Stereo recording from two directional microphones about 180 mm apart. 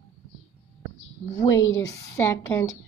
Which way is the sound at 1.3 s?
15° left (ahead or behind).